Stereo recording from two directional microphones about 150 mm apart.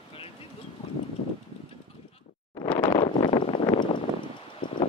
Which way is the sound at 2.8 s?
35° left (ahead or behind).